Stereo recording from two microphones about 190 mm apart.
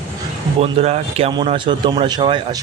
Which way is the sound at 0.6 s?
35° right (ahead or behind).